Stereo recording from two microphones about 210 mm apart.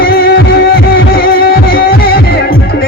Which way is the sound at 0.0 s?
45° left (ahead or behind).